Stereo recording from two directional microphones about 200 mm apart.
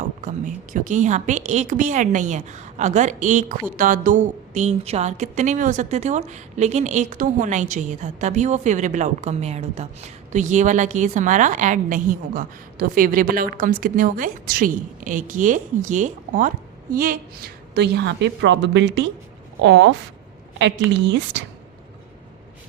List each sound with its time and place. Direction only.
0.3 s a woman's voice: 40° right (ahead or behind); by 21.4 s 60° right (ahead or behind)